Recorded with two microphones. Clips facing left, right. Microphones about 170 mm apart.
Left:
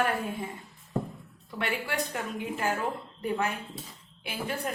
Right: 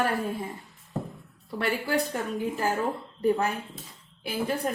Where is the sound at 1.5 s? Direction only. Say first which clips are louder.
Right 5 dB; 35° right (ahead or behind).